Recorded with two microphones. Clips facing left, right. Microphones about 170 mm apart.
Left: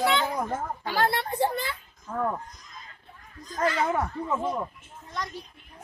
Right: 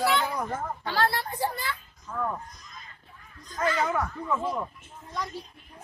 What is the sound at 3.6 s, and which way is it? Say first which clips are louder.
Speech: left 1 dB; 30° left (ahead or behind).